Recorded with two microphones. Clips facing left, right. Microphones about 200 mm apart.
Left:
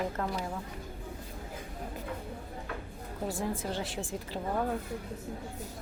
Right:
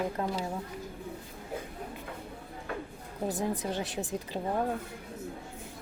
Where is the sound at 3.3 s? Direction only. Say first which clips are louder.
Right 2 dB; 20° right (ahead or behind).